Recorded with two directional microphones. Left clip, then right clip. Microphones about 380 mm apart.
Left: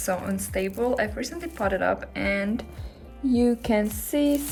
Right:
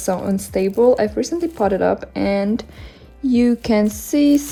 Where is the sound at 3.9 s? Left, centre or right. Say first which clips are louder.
Right 7 dB; centre.